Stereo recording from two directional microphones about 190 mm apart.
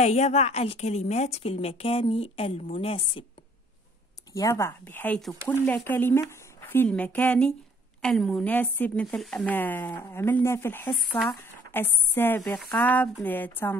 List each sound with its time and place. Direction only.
0.0 s a woman's voice: 35° left (ahead or behind)
4.3 s a woman's voice: 15° left (ahead or behind)